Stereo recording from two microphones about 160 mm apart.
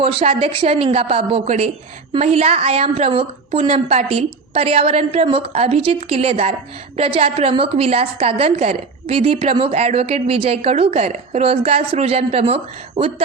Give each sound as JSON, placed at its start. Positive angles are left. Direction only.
{"t": 0.0, "sound": "a woman's voice", "side_deg": -35}